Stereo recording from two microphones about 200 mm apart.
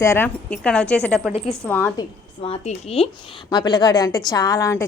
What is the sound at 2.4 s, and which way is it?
A woman's voice, 30° left (ahead or behind).